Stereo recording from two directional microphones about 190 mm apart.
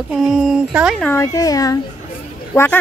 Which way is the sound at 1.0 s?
15° left (ahead or behind).